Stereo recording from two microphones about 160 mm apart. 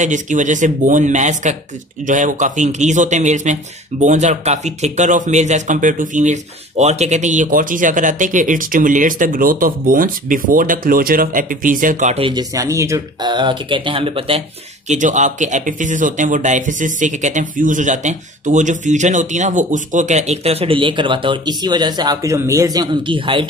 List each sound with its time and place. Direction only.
0.0 s speech: 50° right (ahead or behind)
12.2 s speech: 30° right (ahead or behind)
14.9 s speech: 50° right (ahead or behind); by 23.4 s 30° right (ahead or behind)